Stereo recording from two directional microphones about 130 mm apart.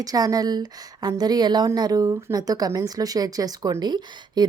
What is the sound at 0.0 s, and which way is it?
A woman's voice, 30° right (ahead or behind).